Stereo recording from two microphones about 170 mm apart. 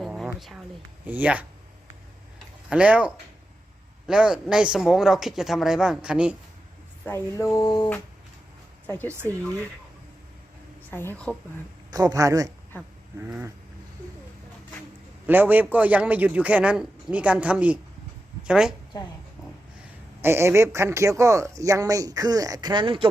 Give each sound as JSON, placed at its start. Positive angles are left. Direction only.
{"t": 0.0, "sound": "a sound", "side_deg": 0}
{"t": 0.3, "sound": "speech", "side_deg": 0}
{"t": 2.6, "sound": "speech", "side_deg": -5}
{"t": 7.0, "sound": "a sound", "side_deg": 15}
{"t": 10.9, "sound": "a woman's voice", "side_deg": 10}
{"t": 11.9, "sound": "speech", "side_deg": -20}
{"t": 12.7, "sound": "a woman's voice", "side_deg": 10}
{"t": 13.1, "sound": "speech", "side_deg": -10}
{"t": 15.3, "sound": "a woman's voice", "side_deg": -10}
{"t": 20.2, "sound": "speech", "side_deg": -15}